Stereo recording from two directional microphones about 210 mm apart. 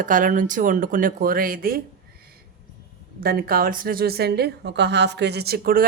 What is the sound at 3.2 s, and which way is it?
A woman's voice, 45° right (ahead or behind).